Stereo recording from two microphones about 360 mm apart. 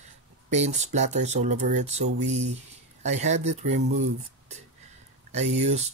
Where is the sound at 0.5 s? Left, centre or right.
Centre.